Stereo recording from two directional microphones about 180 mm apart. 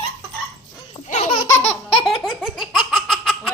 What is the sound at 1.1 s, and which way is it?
Laughter, 35° left (ahead or behind).